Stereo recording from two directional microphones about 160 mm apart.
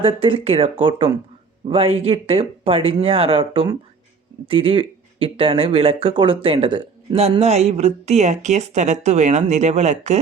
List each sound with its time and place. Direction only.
0.0 s speech: 35° right (ahead or behind)